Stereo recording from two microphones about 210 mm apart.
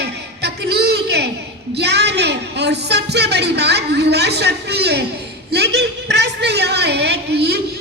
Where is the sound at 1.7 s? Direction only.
55° right (ahead or behind).